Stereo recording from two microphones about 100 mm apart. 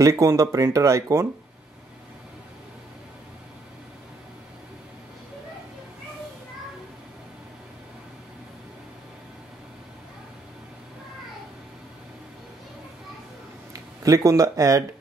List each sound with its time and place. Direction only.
0.0 s speech: 30° right (ahead or behind)
13.7 s speech: 35° right (ahead or behind)